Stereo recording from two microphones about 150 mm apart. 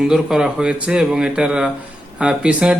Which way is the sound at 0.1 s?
5° right (ahead or behind).